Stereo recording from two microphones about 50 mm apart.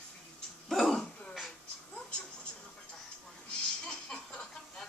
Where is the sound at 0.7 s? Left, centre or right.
Centre.